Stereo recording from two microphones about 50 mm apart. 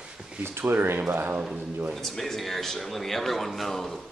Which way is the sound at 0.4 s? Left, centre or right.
Right.